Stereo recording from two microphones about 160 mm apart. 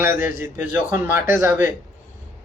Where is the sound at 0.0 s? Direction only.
15° right (ahead or behind).